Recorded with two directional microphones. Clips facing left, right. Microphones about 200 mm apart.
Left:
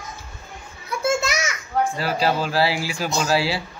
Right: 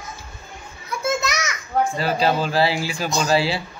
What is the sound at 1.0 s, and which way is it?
Children playing, 30° left (ahead or behind).